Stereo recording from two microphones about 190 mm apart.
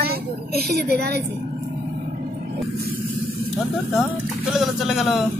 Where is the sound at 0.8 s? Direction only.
60° right (ahead or behind).